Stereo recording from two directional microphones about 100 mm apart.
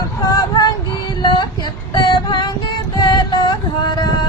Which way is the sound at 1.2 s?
45° left (ahead or behind).